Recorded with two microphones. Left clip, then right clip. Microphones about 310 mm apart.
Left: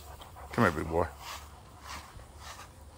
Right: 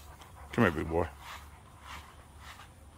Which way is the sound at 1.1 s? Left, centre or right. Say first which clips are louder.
Left 3 dB; left.